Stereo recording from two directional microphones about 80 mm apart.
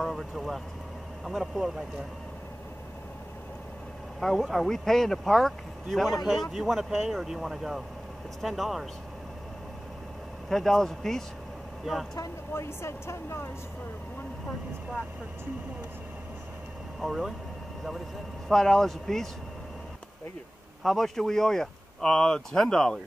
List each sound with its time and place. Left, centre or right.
0.0 s speech: centre
4.2 s speech: centre
10.5 s speech: centre
12.5 s speech: left
17.0 s speech: centre
18.5 s speech: centre
20.8 s speech: centre